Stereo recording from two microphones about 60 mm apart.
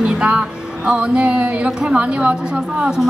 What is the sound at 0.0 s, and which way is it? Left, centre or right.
A woman's voice, centre.